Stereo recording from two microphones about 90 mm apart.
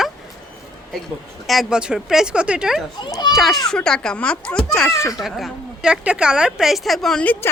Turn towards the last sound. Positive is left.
turn(degrees=5)  # may be behind; listen again after turning